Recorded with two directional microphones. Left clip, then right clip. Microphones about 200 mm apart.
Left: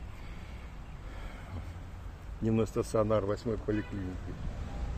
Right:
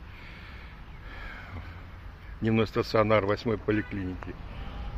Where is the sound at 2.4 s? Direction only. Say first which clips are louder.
Right 4 dB; 10° right (ahead or behind); by 3.9 s 25° right (ahead or behind).